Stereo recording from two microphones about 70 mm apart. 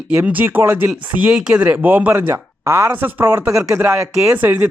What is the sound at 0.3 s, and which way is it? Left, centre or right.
Speech, right.